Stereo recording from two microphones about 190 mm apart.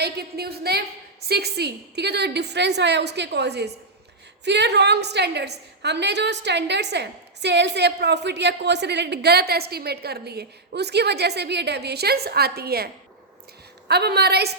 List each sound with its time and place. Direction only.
0.0 s a woman's voice: 55° right (ahead or behind)